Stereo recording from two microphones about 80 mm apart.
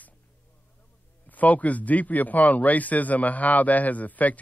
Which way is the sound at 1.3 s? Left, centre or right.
Centre.